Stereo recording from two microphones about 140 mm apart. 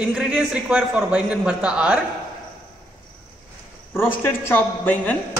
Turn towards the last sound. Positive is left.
turn(degrees=15)  # may be behind; listen again after turning